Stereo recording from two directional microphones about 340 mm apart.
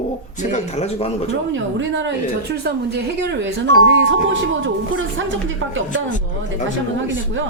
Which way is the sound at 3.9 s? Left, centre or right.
Right.